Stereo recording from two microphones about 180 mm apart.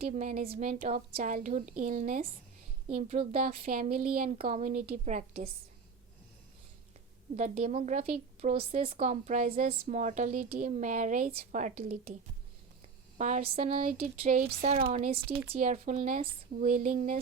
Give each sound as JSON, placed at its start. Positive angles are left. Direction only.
{"t": 0.0, "sound": "a woman's voice", "side_deg": -45}
{"t": 2.9, "sound": "a woman's voice", "side_deg": -35}
{"t": 3.7, "sound": "a woman's voice", "side_deg": -55}
{"t": 4.4, "sound": "a woman's voice", "side_deg": -35}
{"t": 7.3, "sound": "a woman's voice", "side_deg": -40}
{"t": 13.1, "sound": "a woman's voice", "side_deg": -45}